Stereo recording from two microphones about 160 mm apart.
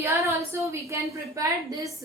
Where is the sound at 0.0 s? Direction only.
20° right (ahead or behind).